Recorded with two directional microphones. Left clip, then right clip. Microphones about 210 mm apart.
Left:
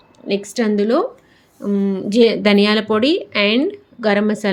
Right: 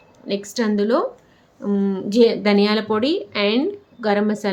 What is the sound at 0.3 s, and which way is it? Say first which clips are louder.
A woman's voice: left 4 dB; 10° left (ahead or behind).